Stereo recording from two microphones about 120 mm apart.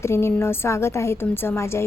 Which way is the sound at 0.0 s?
20° left (ahead or behind).